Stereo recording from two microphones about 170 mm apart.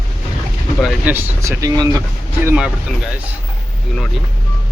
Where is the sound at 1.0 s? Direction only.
10° right (ahead or behind).